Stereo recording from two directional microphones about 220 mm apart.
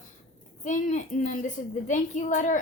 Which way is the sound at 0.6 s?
35° left (ahead or behind).